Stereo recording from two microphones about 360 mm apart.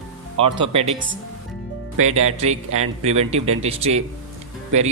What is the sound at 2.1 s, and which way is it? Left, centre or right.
Speech, centre.